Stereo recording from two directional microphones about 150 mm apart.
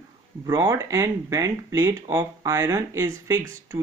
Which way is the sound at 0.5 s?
20° right (ahead or behind).